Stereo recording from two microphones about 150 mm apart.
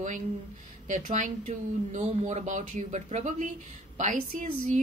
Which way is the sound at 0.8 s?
55° right (ahead or behind).